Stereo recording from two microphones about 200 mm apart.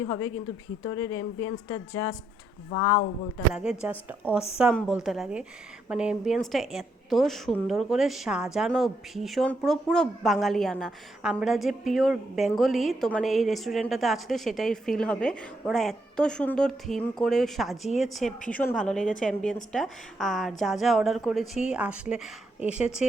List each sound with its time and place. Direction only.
0.9 s speech: 90° left
3.5 s a woman's voice: 5° right (ahead or behind)